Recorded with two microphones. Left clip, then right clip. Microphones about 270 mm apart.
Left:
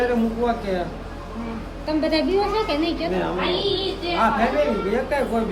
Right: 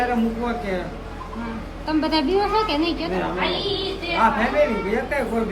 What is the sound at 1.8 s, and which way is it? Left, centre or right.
A man's voice, centre.